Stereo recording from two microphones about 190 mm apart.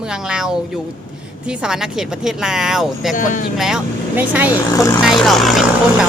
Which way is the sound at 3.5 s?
Centre (ahead or behind).